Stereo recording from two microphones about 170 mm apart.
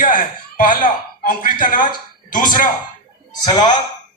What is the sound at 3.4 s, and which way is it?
Music, 25° left (ahead or behind).